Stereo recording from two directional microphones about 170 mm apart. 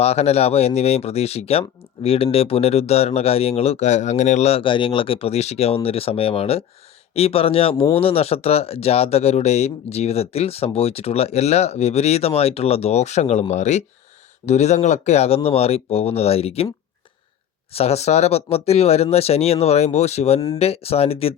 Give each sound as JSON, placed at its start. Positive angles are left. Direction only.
{"t": 0.0, "sound": "speech", "side_deg": 40}
{"t": 17.7, "sound": "speech", "side_deg": 40}